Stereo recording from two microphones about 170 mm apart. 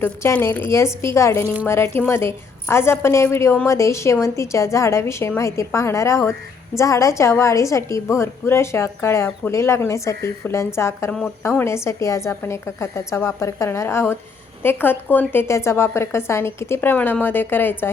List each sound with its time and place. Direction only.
0.0 s a woman's voice: 15° left (ahead or behind)